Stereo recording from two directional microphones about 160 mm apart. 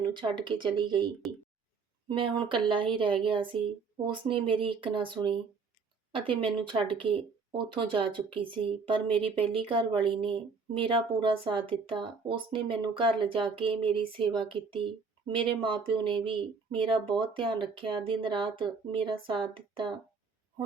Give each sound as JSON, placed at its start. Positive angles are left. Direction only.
{"t": 0.1, "sound": "speech", "side_deg": -30}
{"t": 2.1, "sound": "speech", "side_deg": -30}